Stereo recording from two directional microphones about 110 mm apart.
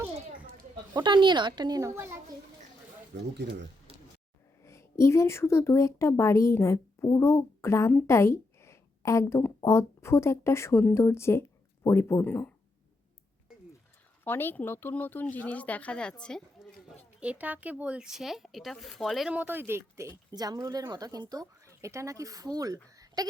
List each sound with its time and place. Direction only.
0.9 s speech: 45° right (ahead or behind)
1.9 s a woman's voice: 25° right (ahead or behind)
4.6 s a woman's voice: 25° left (ahead or behind)
8.0 s a sound: 25° left (ahead or behind)
9.6 s speech: 25° left (ahead or behind)
14.3 s speech: 20° left (ahead or behind)
17.2 s speech: 10° right (ahead or behind)
19.3 s a woman's voice: 15° right (ahead or behind)
20.3 s speech: 35° right (ahead or behind)